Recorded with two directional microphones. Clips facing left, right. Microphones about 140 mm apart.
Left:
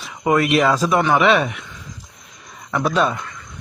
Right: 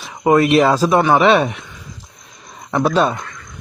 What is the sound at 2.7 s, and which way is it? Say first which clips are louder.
Speech: right 3 dB; 30° right (ahead or behind).